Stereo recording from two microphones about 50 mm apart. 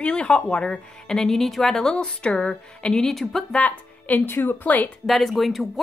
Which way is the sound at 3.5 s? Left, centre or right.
Left.